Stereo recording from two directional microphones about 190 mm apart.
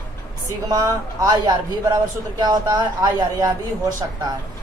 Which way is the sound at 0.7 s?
20° right (ahead or behind).